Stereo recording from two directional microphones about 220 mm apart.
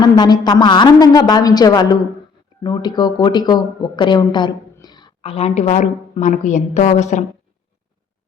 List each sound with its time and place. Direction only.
0.0 s a woman's voice: 20° left (ahead or behind)